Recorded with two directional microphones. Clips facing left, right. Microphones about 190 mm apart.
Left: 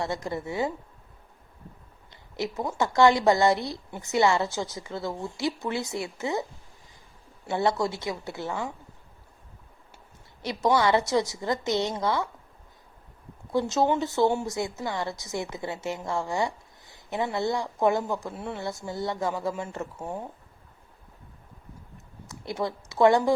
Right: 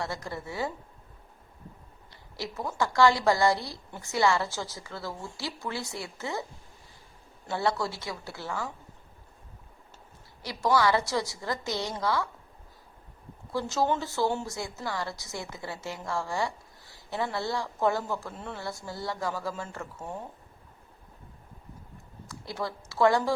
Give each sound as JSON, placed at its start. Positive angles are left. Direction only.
{"t": 0.0, "sound": "a woman's voice", "side_deg": 20}
{"t": 2.3, "sound": "a woman's voice", "side_deg": 20}
{"t": 7.4, "sound": "a woman's voice", "side_deg": 20}
{"t": 10.4, "sound": "a woman's voice", "side_deg": 20}
{"t": 13.5, "sound": "a woman's voice", "side_deg": 20}
{"t": 22.3, "sound": "speech", "side_deg": 20}